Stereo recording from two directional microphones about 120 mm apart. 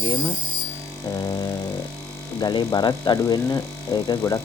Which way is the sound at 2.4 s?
35° left (ahead or behind).